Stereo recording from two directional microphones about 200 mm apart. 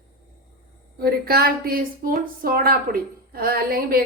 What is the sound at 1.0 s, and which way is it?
A woman's voice, 50° right (ahead or behind).